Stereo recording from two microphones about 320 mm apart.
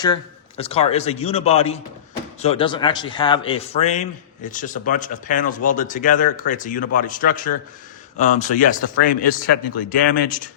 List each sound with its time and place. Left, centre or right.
0.0 s a man's voice: centre